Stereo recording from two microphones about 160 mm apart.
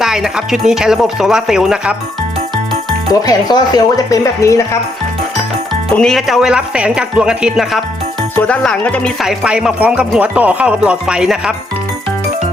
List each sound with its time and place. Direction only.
0.0 s speech: 5° right (ahead or behind)
3.1 s speech: 25° left (ahead or behind)
6.0 s speech: centre (ahead or behind)
9.2 s speech: 5° right (ahead or behind)